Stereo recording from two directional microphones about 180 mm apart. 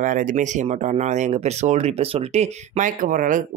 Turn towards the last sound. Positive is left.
turn(degrees=-45)  # may be behind; listen again after turning